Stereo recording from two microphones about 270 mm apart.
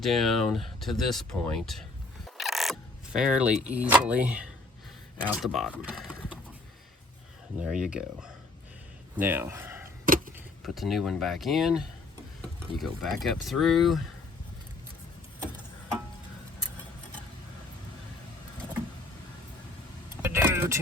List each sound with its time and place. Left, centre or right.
0.0 s speech: centre
7.6 s speech: centre
9.8 s a sound: right
10.6 s speech: centre
20.2 s vehicle: centre